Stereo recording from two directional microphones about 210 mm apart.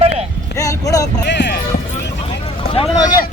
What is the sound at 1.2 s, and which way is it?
Speech, 55° left (ahead or behind).